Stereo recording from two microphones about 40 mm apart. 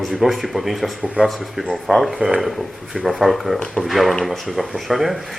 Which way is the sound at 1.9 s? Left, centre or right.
Centre.